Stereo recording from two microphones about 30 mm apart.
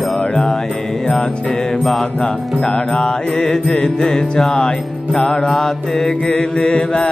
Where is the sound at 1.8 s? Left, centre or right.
Centre.